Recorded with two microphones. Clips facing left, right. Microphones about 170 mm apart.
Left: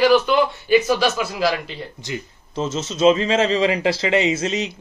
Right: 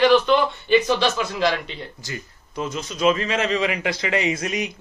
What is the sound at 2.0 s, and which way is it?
A man's voice, 20° left (ahead or behind).